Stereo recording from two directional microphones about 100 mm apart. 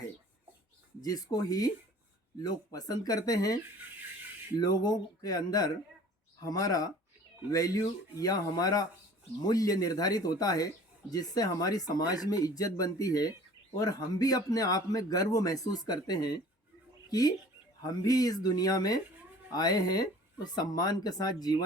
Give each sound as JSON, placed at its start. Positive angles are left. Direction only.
{"t": 1.0, "sound": "speech", "side_deg": 40}